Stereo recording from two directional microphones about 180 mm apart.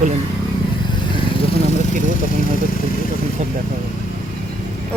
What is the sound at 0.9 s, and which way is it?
Vehicle, 30° left (ahead or behind).